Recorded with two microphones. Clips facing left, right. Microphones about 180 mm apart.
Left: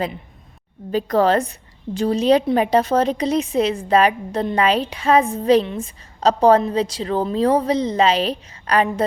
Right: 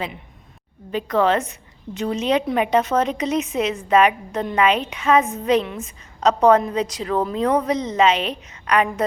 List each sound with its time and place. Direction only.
0.9 s a woman's voice: 35° left (ahead or behind)